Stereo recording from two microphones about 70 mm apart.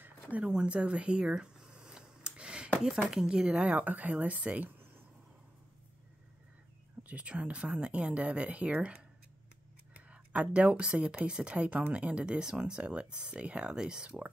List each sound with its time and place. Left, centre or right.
0.0 s a sound: right
3.1 s speech: centre; by 5.0 s right
7.0 s speech: centre